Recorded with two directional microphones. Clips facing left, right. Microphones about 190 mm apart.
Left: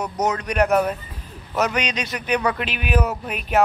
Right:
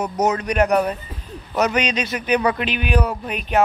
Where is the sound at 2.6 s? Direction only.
5° left (ahead or behind).